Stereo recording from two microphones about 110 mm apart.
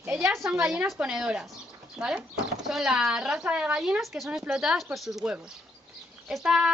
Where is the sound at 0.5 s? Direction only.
10° right (ahead or behind).